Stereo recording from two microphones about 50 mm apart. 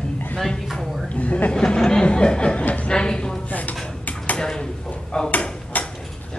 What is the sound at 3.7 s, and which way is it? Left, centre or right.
Dishes, centre.